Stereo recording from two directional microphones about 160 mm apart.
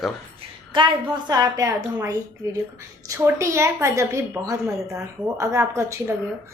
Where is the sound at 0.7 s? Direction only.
25° right (ahead or behind).